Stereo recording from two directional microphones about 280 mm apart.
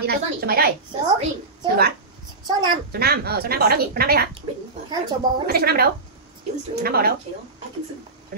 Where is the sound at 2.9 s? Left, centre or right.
Right.